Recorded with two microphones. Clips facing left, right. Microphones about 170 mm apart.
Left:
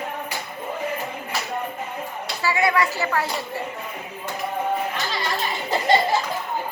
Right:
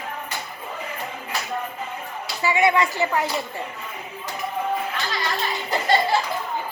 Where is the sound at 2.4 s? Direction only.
20° right (ahead or behind).